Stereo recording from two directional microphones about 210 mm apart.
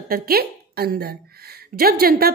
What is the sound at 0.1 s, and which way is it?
A woman's voice, 45° right (ahead or behind).